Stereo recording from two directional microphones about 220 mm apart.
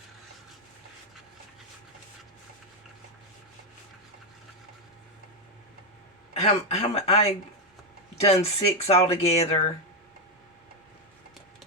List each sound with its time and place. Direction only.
6.3 s speech: 30° left (ahead or behind)